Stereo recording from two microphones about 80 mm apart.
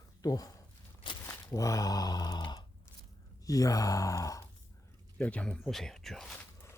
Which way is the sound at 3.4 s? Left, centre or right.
Left.